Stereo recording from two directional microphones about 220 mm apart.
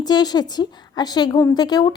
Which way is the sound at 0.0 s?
20° left (ahead or behind).